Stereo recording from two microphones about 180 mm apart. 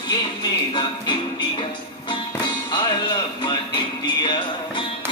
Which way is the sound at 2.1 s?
25° left (ahead or behind).